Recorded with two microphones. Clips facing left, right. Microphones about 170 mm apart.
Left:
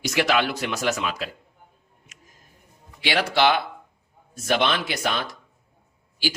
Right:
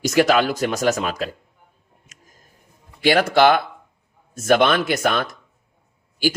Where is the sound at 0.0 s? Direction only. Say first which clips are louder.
Right 6 dB; 45° right (ahead or behind).